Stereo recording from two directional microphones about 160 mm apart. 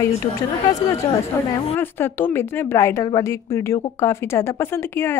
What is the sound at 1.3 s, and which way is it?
A woman's voice, 15° left (ahead or behind).